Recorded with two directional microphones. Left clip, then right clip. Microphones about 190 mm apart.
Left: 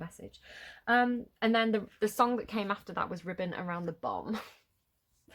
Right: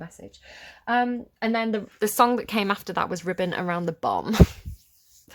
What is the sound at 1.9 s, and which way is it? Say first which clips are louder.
Speech: right 10 dB; 25° right (ahead or behind).